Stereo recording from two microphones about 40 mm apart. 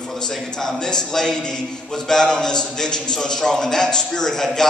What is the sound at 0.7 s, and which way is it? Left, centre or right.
A man's voice, centre.